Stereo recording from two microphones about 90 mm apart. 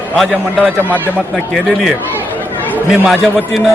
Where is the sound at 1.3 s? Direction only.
Centre (ahead or behind).